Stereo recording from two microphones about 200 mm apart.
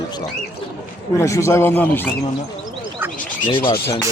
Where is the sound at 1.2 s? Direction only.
15° left (ahead or behind).